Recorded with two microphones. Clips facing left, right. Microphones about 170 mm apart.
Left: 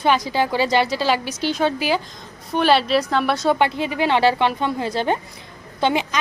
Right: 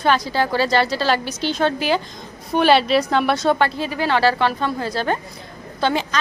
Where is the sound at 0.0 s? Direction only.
15° left (ahead or behind).